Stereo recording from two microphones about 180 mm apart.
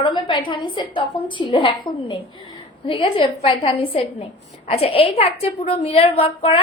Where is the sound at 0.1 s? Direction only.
25° left (ahead or behind).